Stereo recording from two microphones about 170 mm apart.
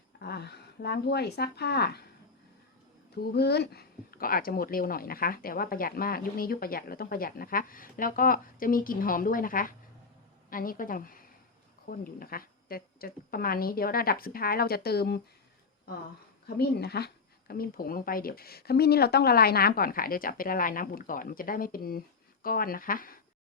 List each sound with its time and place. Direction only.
0.2 s speech: 70° left (ahead or behind)
3.2 s speech: 70° left (ahead or behind)
16.6 s speech: 70° left (ahead or behind)